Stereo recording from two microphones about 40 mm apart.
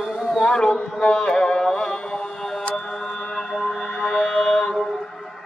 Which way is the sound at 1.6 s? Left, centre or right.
Centre.